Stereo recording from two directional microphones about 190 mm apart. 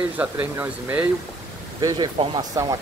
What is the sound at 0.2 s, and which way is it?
Speech, 10° right (ahead or behind).